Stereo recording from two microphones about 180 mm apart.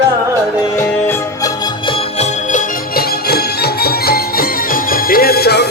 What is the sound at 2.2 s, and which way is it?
Music, 45° left (ahead or behind).